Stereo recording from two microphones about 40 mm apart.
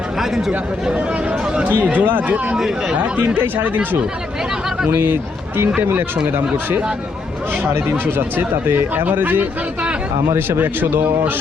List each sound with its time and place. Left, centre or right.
0.2 s speech: centre
1.7 s speech: right
4.9 s speech: right
5.8 s a man's voice: right
9.1 s speech: right
10.2 s a man's voice: right